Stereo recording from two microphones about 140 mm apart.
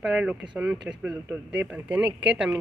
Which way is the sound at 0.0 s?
10° right (ahead or behind).